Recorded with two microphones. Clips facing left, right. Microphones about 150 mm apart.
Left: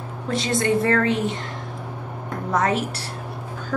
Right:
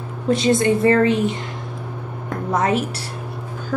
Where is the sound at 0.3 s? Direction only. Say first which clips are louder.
Right 5 dB; 15° right (ahead or behind).